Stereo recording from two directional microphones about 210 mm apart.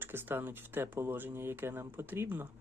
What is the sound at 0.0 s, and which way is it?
Speech, 10° right (ahead or behind).